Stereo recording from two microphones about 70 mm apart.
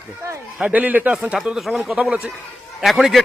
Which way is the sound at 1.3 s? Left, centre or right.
Centre.